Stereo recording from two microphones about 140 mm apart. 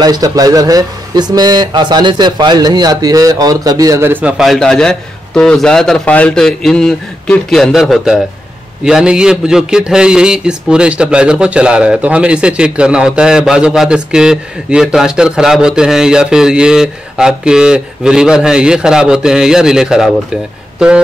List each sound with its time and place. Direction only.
0.0 s speech: 25° right (ahead or behind)
4.4 s a man's voice: centre (ahead or behind)